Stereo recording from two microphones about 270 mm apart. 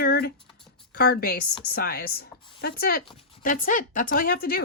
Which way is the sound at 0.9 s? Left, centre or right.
Left.